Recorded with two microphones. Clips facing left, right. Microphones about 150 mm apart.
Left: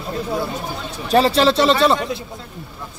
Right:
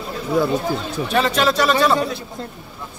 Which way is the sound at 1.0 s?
35° left (ahead or behind).